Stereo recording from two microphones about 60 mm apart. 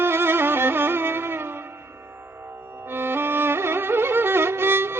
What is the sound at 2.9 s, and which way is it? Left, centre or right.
Music, right.